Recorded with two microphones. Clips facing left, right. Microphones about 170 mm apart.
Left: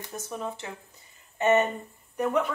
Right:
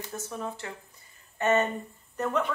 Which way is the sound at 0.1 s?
15° left (ahead or behind).